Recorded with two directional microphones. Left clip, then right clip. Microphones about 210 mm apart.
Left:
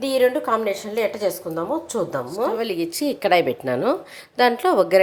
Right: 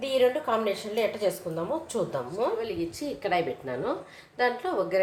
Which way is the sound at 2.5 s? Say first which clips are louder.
Left 7 dB; 55° left (ahead or behind).